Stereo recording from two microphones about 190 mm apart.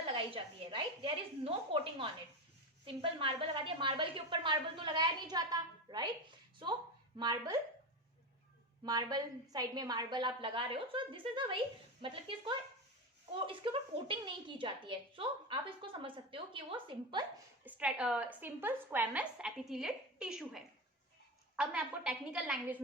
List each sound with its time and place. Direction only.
0.1 s a woman's voice: 25° right (ahead or behind)
7.2 s a woman's voice: 20° right (ahead or behind)
8.8 s a woman's voice: 20° right (ahead or behind)
17.7 s a woman's voice: 5° right (ahead or behind)